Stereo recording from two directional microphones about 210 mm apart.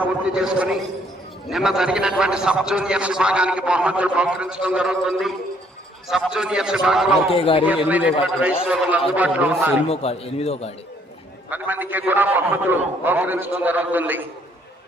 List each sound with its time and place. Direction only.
0.0 s a man's voice: 5° right (ahead or behind)
7.1 s a man's voice: 25° left (ahead or behind)
7.9 s a man's voice: 5° right (ahead or behind)
9.9 s a man's voice: 30° left (ahead or behind)
11.4 s a man's voice: 10° right (ahead or behind)